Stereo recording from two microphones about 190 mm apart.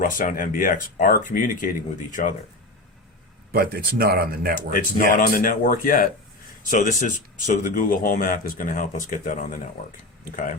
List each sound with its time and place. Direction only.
0.0 s speech: 45° left (ahead or behind)
3.5 s speech: 55° right (ahead or behind)
4.7 s speech: 45° left (ahead or behind)